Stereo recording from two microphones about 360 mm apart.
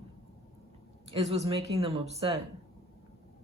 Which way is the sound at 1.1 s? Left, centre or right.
Centre.